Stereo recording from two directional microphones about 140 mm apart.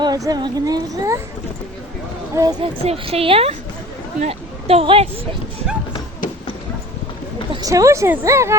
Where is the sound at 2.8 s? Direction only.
45° right (ahead or behind).